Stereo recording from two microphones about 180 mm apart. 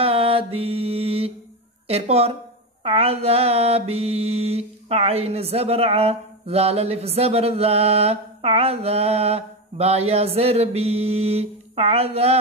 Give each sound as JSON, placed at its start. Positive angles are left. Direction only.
{"t": 0.0, "sound": "music", "side_deg": -30}
{"t": 1.9, "sound": "mantra", "side_deg": -35}